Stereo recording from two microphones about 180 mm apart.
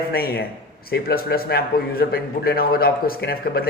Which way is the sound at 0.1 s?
60° left (ahead or behind).